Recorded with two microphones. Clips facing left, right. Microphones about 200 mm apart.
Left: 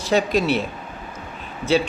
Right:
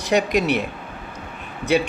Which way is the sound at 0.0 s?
15° right (ahead or behind).